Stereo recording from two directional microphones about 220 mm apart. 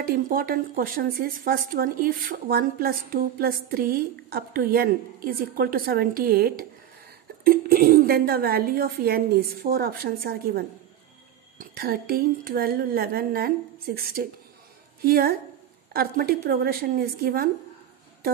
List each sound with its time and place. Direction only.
0.0 s a woman's voice: 40° right (ahead or behind)